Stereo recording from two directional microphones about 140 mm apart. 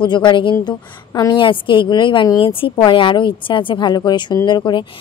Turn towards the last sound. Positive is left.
turn(degrees=35)  # may be behind; listen again after turning